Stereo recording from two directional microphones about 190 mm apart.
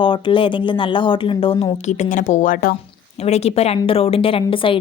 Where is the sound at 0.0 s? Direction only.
25° left (ahead or behind).